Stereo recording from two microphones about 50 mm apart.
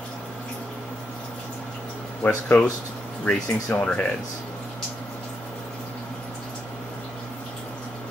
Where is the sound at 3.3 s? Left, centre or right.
Left.